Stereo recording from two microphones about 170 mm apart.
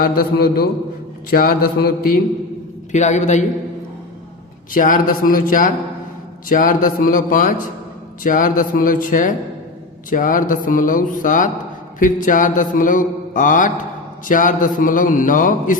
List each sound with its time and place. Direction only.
0.0 s a man's voice: 60° left (ahead or behind)
2.9 s mantra: 45° left (ahead or behind)
4.7 s mantra: 50° left (ahead or behind)